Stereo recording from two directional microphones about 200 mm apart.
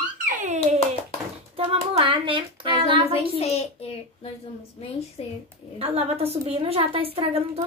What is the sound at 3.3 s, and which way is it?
Speech, 30° left (ahead or behind).